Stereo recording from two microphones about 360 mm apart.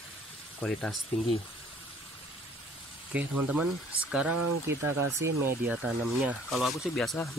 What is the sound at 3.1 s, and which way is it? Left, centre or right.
Speech, centre.